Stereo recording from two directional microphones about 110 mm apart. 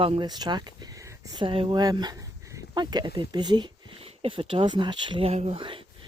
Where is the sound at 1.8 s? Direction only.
40° right (ahead or behind).